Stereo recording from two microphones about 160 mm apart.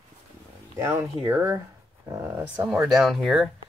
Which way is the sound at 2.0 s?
20° right (ahead or behind).